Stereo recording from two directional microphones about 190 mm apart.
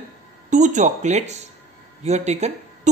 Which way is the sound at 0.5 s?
40° right (ahead or behind).